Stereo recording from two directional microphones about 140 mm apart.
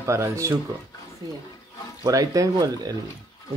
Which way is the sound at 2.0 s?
25° right (ahead or behind).